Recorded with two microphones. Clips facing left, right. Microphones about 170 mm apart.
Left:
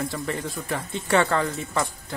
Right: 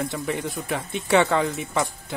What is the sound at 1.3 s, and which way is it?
Speech, 15° right (ahead or behind).